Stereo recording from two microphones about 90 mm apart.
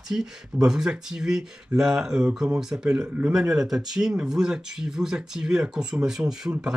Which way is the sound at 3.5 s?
5° right (ahead or behind).